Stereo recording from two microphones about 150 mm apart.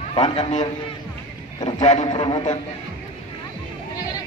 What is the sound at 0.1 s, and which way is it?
Speech, 30° left (ahead or behind).